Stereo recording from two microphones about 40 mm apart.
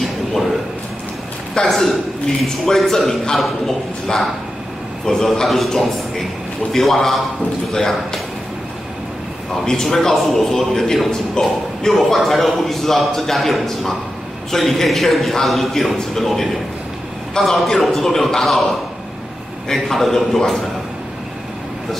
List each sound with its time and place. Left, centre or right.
1.7 s a man's voice: centre
5.0 s a man's voice: centre
9.7 s a man's voice: centre
11.9 s a man's voice: centre